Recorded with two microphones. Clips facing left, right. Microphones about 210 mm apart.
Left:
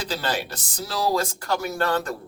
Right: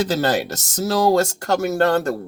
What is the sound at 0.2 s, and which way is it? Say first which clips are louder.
Speech: right 8 dB; 45° right (ahead or behind).